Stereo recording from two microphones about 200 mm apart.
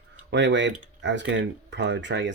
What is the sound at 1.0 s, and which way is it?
Speech, 65° right (ahead or behind).